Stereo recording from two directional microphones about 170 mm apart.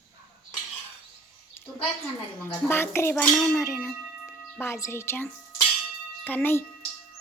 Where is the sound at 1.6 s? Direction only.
15° left (ahead or behind).